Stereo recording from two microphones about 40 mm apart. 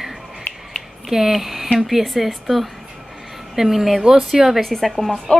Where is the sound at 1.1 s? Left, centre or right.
Centre.